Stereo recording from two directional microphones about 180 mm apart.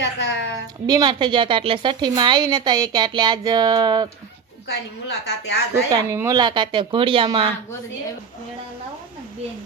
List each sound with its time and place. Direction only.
0.0 s a woman's voice: 75° left (ahead or behind)
0.9 s a woman's voice: 25° right (ahead or behind)
4.7 s a woman's voice: 70° left (ahead or behind)
5.7 s a woman's voice: 15° right (ahead or behind)